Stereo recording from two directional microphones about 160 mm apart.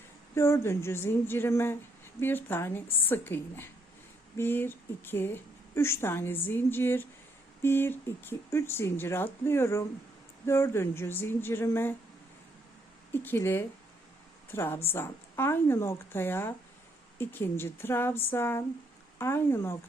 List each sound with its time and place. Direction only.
0.3 s a woman's voice: 15° left (ahead or behind)
13.2 s a woman's voice: 15° left (ahead or behind)